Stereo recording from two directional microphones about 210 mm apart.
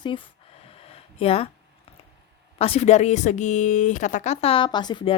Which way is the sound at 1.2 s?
30° left (ahead or behind).